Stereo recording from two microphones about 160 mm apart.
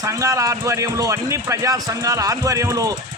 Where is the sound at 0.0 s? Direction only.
20° right (ahead or behind).